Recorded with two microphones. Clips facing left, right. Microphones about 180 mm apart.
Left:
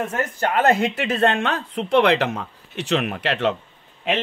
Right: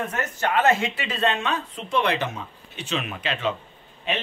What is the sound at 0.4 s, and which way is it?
Speech, 35° left (ahead or behind).